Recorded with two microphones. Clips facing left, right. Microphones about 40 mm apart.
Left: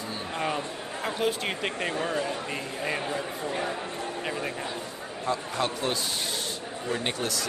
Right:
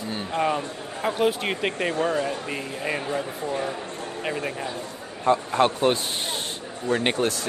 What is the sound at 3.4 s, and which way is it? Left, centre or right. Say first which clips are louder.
Speech: right 2 dB; centre.